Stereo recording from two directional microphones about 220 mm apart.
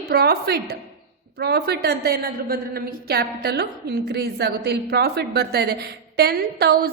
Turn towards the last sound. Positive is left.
turn(degrees=-45)  # may be behind; listen again after turning